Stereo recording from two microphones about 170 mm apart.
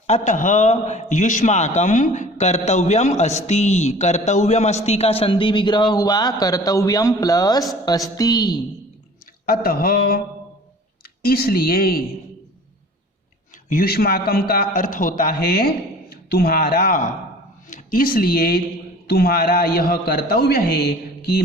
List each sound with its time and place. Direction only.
0.1 s a man's voice: 50° left (ahead or behind); by 8.6 s 25° left (ahead or behind)
9.5 s a man's voice: 60° left (ahead or behind)
13.7 s a man's voice: 60° left (ahead or behind)